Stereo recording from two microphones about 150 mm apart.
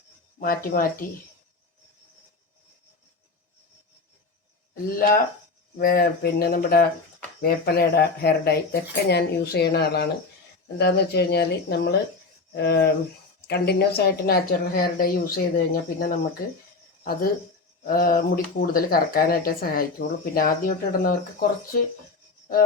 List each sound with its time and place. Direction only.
0.3 s speech: 75° left (ahead or behind)
4.7 s speech: 75° left (ahead or behind)
13.5 s speech: 90° left; by 21.8 s 65° left (ahead or behind)